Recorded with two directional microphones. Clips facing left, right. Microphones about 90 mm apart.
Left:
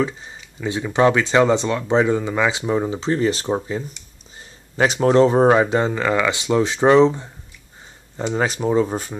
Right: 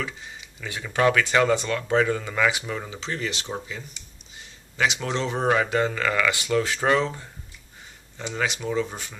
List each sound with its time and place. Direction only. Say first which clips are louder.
0.0 s speech: left 10 dB; 25° left (ahead or behind)
8.2 s speech: left 7 dB; 40° left (ahead or behind)